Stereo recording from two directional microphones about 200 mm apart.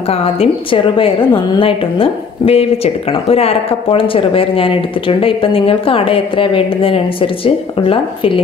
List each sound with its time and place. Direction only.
0.1 s a woman's voice: 30° left (ahead or behind)